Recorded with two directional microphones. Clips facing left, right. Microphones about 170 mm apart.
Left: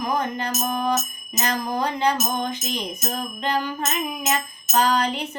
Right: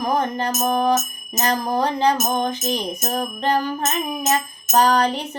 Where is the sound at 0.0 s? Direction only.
40° right (ahead or behind).